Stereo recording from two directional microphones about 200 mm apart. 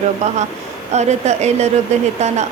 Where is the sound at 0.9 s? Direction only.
35° right (ahead or behind).